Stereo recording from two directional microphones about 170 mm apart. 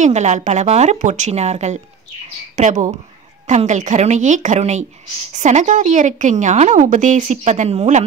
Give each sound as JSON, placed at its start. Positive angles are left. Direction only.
{"t": 0.0, "sound": "speech", "side_deg": -45}